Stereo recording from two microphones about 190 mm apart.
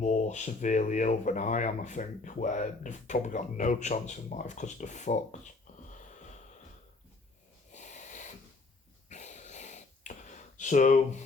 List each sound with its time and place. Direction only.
0.0 s speech: 40° left (ahead or behind)
5.9 s wheeze: 40° left (ahead or behind)
7.7 s a sound: 40° left (ahead or behind)